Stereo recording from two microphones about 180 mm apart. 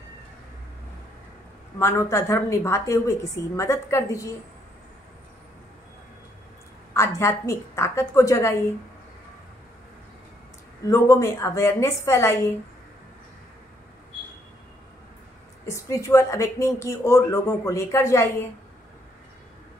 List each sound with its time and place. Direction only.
1.8 s speech: 15° left (ahead or behind)
7.2 s speech: 15° left (ahead or behind)
10.8 s speech: 15° left (ahead or behind)
15.6 s speech: 15° left (ahead or behind)